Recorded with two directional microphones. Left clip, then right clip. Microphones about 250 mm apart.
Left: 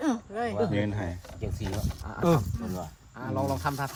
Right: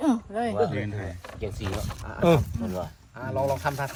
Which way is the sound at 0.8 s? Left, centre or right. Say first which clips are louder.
Left 3 dB; centre.